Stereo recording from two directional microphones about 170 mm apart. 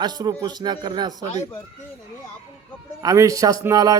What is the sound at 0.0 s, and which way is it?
A man's voice, 25° right (ahead or behind).